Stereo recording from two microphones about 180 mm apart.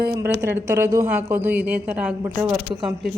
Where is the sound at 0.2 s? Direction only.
15° right (ahead or behind).